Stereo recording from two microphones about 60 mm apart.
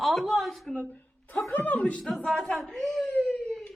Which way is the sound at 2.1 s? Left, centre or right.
Centre.